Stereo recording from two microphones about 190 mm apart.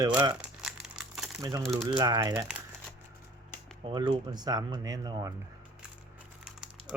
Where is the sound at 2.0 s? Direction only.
20° right (ahead or behind).